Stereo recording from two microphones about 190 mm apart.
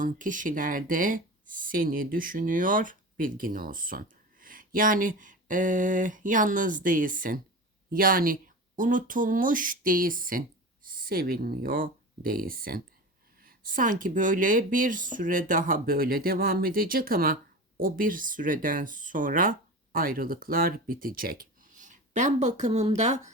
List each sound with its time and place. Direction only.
0.0 s speech: 45° right (ahead or behind)